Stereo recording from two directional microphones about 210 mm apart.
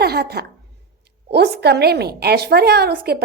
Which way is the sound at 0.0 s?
50° right (ahead or behind).